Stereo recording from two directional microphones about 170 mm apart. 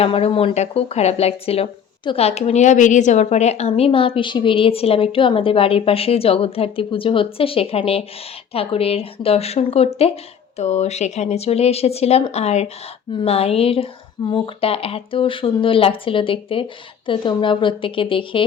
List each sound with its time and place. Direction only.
0.0 s speech: 35° left (ahead or behind)